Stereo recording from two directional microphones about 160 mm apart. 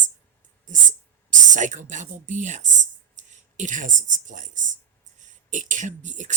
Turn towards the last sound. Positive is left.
turn(degrees=-50)  # may be behind; listen again after turning